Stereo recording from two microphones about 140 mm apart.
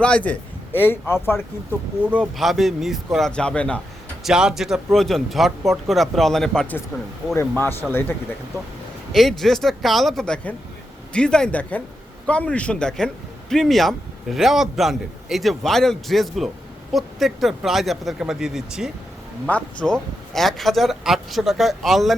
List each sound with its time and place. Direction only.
0.0 s a man's voice: 10° left (ahead or behind)
2.2 s a man's voice: centre (ahead or behind)
4.2 s a man's voice: 5° right (ahead or behind)
7.3 s a man's voice: 15° left (ahead or behind)
9.1 s a man's voice: centre (ahead or behind)
19.5 s a man's voice: 5° left (ahead or behind)